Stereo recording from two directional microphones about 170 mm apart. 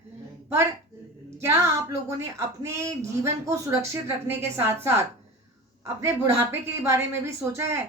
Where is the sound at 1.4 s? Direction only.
15° right (ahead or behind).